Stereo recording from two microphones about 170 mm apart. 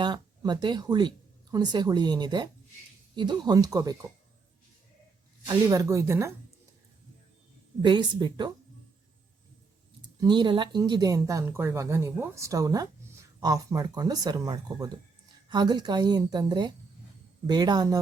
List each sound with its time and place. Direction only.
0.0 s speech: 25° right (ahead or behind)
5.5 s a woman's voice: 20° right (ahead or behind)
7.8 s speech: 25° right (ahead or behind)
10.2 s speech: 25° right (ahead or behind)